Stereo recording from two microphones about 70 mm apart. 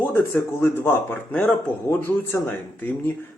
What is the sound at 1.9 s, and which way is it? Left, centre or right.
Speech, left.